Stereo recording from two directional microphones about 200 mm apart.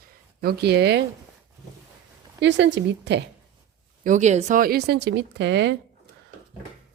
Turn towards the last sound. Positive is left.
turn(degrees=-60)  # may be behind; listen again after turning